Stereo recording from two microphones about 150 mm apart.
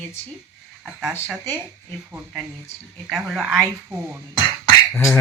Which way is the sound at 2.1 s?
Centre (ahead or behind).